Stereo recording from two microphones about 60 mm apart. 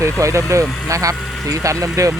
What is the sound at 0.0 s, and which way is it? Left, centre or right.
Speech, right.